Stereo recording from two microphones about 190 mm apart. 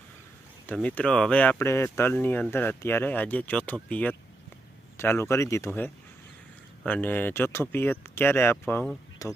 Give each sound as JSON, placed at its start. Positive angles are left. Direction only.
{"t": 0.7, "sound": "speech", "side_deg": 5}